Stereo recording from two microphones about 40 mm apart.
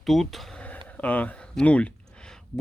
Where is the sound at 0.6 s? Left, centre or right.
Left.